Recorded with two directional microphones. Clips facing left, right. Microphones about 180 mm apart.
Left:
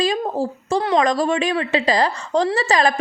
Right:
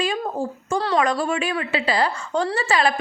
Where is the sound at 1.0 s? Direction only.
40° left (ahead or behind).